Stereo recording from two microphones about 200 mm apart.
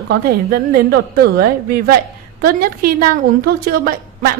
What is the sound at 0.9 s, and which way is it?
A woman's voice, 50° right (ahead or behind).